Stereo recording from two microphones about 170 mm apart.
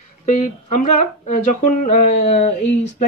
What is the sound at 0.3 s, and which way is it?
Speech, 45° left (ahead or behind).